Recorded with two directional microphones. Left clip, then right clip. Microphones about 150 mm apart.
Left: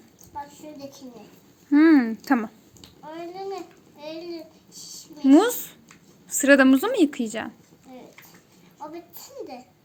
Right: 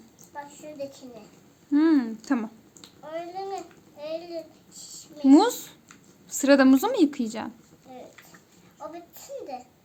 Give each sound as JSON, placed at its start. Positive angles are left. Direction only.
{"t": 1.7, "sound": "speech", "side_deg": 20}
{"t": 5.2, "sound": "a woman's voice", "side_deg": -5}